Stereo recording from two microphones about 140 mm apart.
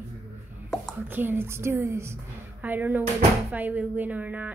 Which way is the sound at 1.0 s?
15° right (ahead or behind).